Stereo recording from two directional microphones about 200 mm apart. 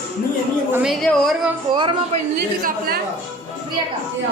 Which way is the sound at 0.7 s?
Centre (ahead or behind).